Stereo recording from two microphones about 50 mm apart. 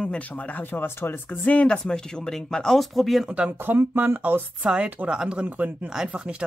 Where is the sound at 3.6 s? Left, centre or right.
Right.